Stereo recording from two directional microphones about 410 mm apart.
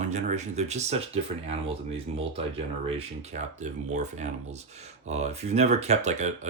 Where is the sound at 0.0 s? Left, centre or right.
Centre.